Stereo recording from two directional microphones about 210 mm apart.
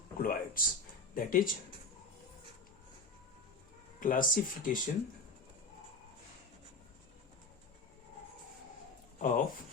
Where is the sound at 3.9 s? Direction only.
40° left (ahead or behind).